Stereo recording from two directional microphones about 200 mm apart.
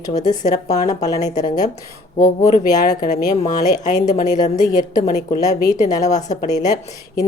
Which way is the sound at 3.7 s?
40° left (ahead or behind).